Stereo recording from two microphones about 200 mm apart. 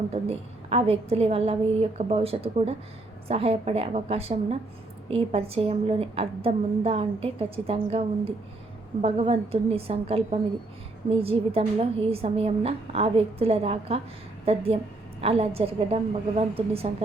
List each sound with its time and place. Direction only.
0.1 s a woman's voice: 30° right (ahead or behind)